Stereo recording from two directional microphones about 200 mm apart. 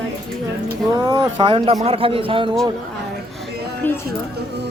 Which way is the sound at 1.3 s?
30° right (ahead or behind).